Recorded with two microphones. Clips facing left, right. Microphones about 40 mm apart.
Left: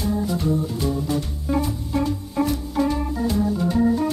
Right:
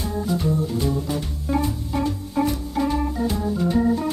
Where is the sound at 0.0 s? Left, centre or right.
Centre.